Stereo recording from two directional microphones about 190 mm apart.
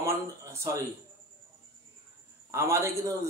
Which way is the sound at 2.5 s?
15° right (ahead or behind).